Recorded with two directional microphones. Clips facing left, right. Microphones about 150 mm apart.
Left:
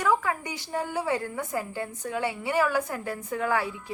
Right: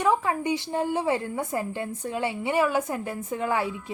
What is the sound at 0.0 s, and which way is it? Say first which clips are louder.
A woman's voice: right 2 dB; 25° right (ahead or behind).